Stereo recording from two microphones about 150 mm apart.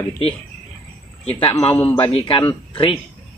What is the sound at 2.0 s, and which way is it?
Speech, 40° left (ahead or behind).